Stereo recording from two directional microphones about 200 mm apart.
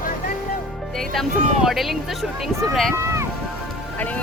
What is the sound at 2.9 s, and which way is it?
Music, 15° right (ahead or behind).